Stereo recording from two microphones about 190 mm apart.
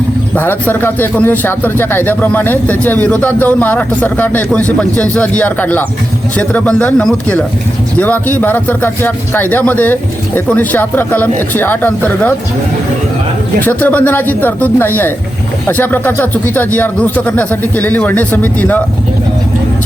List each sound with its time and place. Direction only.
0.3 s speech: 10° left (ahead or behind)
13.6 s speech: 10° left (ahead or behind)